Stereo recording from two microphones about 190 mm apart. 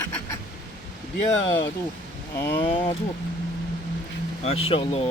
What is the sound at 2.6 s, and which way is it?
Speech, 25° left (ahead or behind).